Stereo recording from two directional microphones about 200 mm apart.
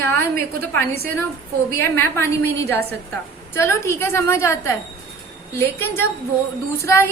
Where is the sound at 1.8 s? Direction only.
10° left (ahead or behind).